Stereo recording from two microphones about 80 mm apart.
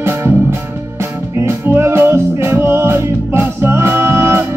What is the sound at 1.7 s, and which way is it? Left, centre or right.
Music, right.